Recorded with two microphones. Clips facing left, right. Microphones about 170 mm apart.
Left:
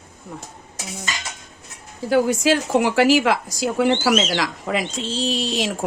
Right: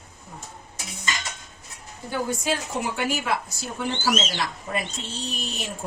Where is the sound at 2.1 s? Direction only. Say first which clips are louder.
Left 9 dB; 85° left.